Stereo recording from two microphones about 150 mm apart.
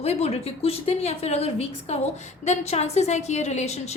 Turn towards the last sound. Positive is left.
turn(degrees=45)  # may be behind; listen again after turning